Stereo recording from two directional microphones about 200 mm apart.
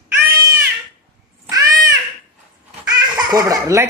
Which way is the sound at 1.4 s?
20° right (ahead or behind).